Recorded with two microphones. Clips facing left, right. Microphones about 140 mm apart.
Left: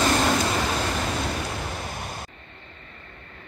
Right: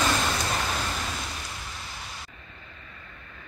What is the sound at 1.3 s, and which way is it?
Waves, 65° left (ahead or behind).